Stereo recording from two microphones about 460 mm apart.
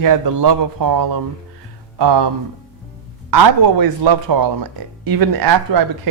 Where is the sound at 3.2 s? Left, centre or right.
Right.